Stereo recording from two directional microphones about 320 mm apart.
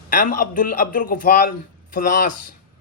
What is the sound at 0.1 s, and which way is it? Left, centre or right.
A man's voice, left.